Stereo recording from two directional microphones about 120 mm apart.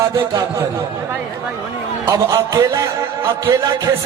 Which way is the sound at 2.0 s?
30° right (ahead or behind).